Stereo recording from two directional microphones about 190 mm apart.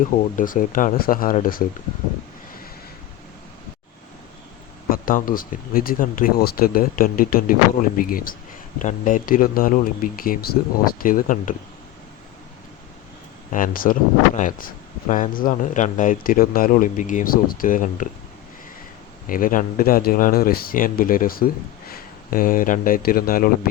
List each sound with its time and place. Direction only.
0.1 s speech: 45° left (ahead or behind)
4.9 s speech: 45° left (ahead or behind)
13.5 s speech: 45° left (ahead or behind)
19.3 s speech: 45° left (ahead or behind)